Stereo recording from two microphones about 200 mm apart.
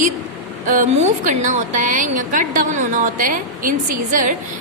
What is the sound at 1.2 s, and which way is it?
A woman's voice, 40° right (ahead or behind).